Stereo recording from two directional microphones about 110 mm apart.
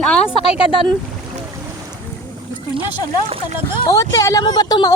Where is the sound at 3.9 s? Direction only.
30° left (ahead or behind).